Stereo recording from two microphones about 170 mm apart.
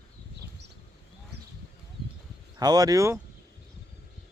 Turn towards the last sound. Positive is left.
turn(degrees=-15)  # may be behind; listen again after turning